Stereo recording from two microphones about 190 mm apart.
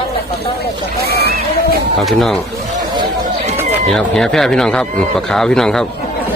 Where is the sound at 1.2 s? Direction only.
55° right (ahead or behind).